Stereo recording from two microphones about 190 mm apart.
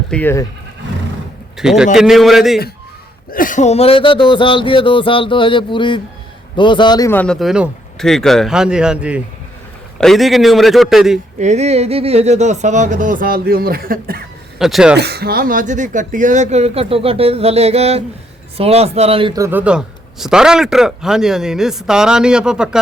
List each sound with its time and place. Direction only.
0.1 s speech: 10° left (ahead or behind)
1.5 s a man's voice: centre (ahead or behind)
3.3 s music: 45° left (ahead or behind); by 7.1 s 20° left (ahead or behind)
7.1 s a man's voice: 5° left (ahead or behind)
11.3 s speech: 35° right (ahead or behind)
14.6 s a man's voice: centre (ahead or behind)
14.9 s a man's voice: 60° right (ahead or behind); by 22.8 s 5° right (ahead or behind)